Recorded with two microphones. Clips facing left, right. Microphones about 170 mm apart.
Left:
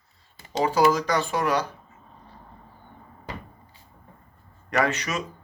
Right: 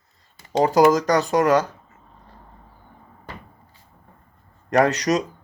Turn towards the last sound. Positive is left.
turn(degrees=-40)  # may be behind; listen again after turning